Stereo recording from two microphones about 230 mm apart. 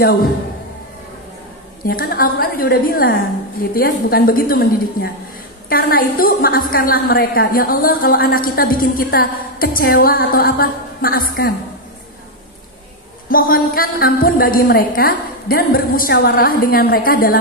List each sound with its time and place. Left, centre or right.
1.9 s a woman's voice: left
13.3 s a woman's voice: left